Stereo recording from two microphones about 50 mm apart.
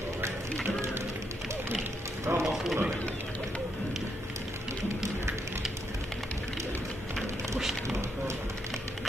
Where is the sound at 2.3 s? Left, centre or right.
Right.